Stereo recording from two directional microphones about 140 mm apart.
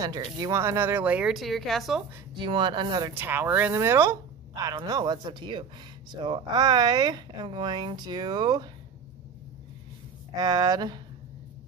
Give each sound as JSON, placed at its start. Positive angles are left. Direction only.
{"t": 0.0, "sound": "speech", "side_deg": -30}
{"t": 2.3, "sound": "speech", "side_deg": -35}
{"t": 3.1, "sound": "speech", "side_deg": -15}
{"t": 10.3, "sound": "speech", "side_deg": -25}